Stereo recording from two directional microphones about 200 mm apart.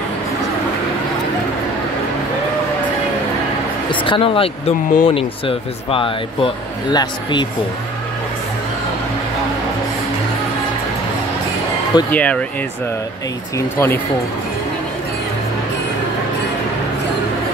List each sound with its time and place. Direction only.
3.9 s speech: 25° left (ahead or behind)
12.1 s speech: 5° left (ahead or behind)
13.6 s speech: 10° left (ahead or behind)